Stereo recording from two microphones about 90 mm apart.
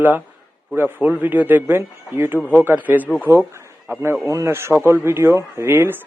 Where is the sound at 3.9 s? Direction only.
30° right (ahead or behind).